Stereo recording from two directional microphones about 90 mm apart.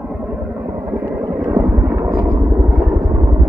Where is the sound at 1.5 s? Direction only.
20° right (ahead or behind).